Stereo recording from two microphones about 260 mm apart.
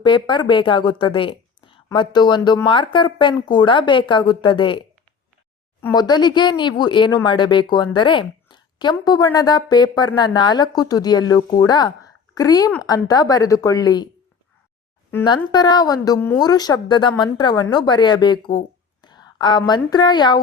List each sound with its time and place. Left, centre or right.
0.0 s speech: centre
5.8 s speech: centre
15.1 s a woman's voice: centre